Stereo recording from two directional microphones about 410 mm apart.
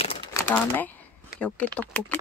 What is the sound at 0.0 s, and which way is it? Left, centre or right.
Speech, centre.